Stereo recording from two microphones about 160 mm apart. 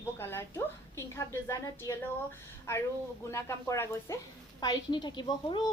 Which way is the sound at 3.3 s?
15° left (ahead or behind).